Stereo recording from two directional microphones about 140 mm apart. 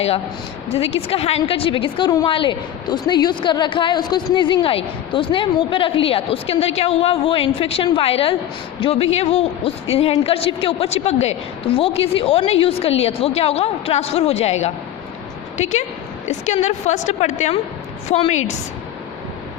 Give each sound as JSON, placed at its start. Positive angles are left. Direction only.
{"t": 0.7, "sound": "a woman's voice", "side_deg": 45}